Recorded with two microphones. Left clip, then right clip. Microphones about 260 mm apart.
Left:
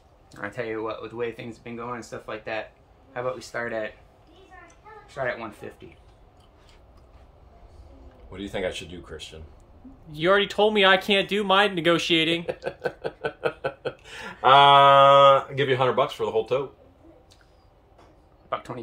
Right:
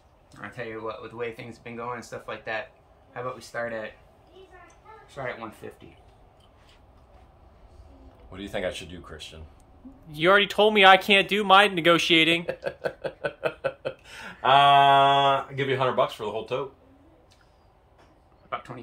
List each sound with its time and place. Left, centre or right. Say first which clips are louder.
0.3 s speech: left 5 dB; centre
1.1 s speech: left 3 dB; centre
5.0 s speech: left 5 dB; centre
8.3 s speech: left 1 dB; centre
18.5 s a sound: left 3 dB; left